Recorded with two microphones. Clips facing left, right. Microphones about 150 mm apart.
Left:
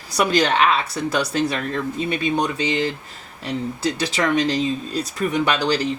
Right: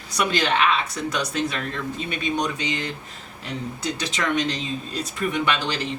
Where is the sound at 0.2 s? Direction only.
40° left (ahead or behind).